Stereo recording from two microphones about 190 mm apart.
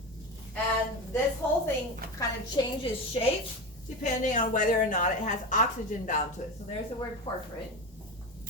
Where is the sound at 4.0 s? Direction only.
40° left (ahead or behind).